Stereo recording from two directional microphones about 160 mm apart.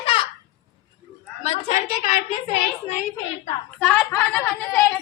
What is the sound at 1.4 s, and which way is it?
Speech, 40° left (ahead or behind).